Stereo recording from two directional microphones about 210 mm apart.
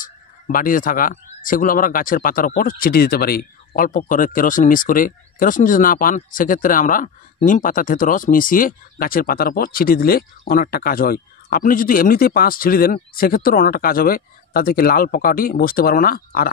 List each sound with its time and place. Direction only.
0.0 s speech: 40° left (ahead or behind)